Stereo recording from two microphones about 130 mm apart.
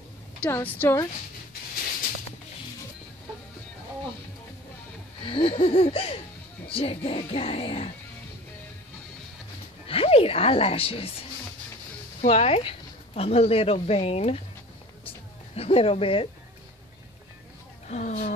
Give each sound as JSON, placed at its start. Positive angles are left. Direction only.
{"t": 0.5, "sound": "a woman's voice", "side_deg": 15}
{"t": 5.2, "sound": "music", "side_deg": 45}
{"t": 9.8, "sound": "music", "side_deg": 50}
{"t": 12.2, "sound": "speech", "side_deg": 55}
{"t": 15.5, "sound": "music", "side_deg": 50}
{"t": 17.8, "sound": "speech", "side_deg": 70}